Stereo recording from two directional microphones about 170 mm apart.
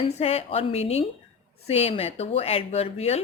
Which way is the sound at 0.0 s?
35° left (ahead or behind).